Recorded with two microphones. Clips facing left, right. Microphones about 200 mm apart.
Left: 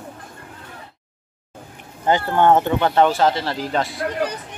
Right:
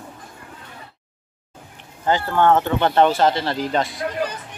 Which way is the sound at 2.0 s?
15° left (ahead or behind).